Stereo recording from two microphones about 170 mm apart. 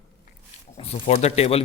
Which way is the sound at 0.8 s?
35° left (ahead or behind).